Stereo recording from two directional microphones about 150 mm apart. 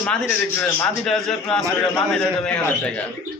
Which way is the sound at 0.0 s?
10° left (ahead or behind).